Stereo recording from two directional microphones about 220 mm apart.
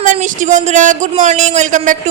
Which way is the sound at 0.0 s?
35° right (ahead or behind).